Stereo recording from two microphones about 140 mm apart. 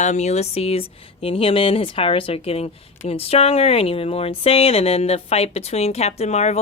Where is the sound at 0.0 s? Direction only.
55° left (ahead or behind).